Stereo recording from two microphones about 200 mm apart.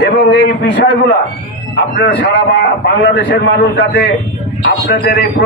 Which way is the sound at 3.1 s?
55° left (ahead or behind).